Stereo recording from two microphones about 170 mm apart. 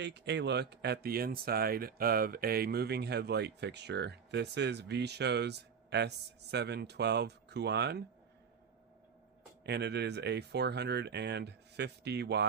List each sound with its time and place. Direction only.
0.0 s speech: 90° right
9.6 s speech: 80° right